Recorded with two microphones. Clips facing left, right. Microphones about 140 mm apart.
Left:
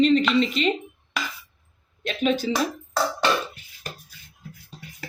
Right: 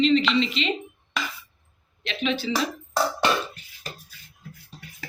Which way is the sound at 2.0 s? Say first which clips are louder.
Left 4 dB; 45° left (ahead or behind).